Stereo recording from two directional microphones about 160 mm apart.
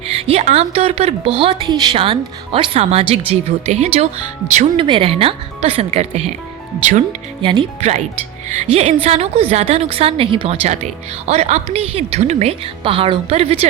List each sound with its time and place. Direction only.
0.1 s speech: 40° right (ahead or behind)
7.8 s speech: 45° right (ahead or behind)